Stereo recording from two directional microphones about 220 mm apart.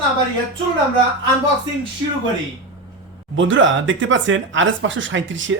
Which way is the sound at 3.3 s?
60° right (ahead or behind).